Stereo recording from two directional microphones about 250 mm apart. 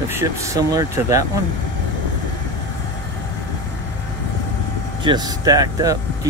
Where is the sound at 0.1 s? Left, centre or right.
Centre.